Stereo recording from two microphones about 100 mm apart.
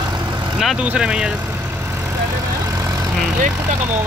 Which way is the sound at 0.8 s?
10° right (ahead or behind).